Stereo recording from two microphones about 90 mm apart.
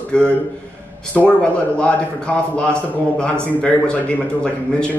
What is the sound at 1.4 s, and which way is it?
A man's voice, 10° left (ahead or behind).